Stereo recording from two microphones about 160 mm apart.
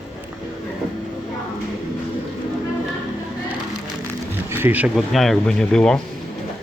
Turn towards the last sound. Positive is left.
turn(degrees=5)  # may be behind; listen again after turning